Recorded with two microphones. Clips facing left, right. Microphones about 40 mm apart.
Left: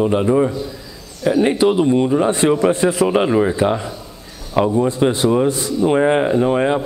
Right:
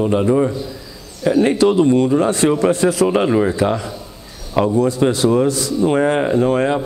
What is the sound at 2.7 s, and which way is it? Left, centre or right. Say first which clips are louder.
Speech: right 1 dB; left.